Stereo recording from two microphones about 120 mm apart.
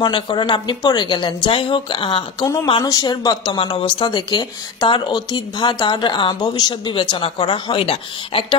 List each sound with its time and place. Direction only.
0.0 s speech: 40° left (ahead or behind)
2.4 s speech: 30° left (ahead or behind); by 8.5 s 50° left (ahead or behind)